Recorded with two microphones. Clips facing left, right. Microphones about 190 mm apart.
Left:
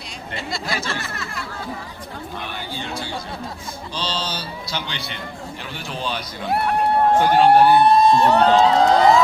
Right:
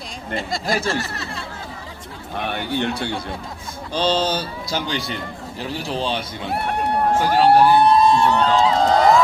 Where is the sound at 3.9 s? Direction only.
50° right (ahead or behind).